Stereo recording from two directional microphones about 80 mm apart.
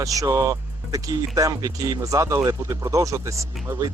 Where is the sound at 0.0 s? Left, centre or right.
Right.